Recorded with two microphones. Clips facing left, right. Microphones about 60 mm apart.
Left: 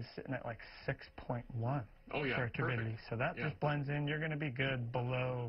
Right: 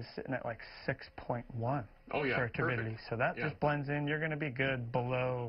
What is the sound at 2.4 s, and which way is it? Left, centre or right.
Speech, right.